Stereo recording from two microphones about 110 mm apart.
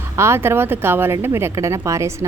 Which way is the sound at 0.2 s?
25° right (ahead or behind).